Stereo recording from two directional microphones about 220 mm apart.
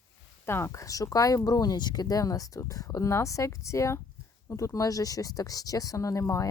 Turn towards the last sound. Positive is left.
turn(degrees=15)  # may be behind; listen again after turning